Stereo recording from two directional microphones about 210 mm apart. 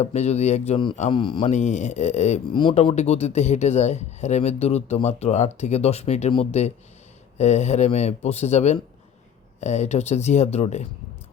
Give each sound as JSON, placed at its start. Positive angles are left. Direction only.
{"t": 0.0, "sound": "a man's voice", "side_deg": 30}